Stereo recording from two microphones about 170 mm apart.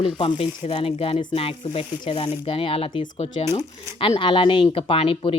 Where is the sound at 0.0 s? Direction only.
30° left (ahead or behind).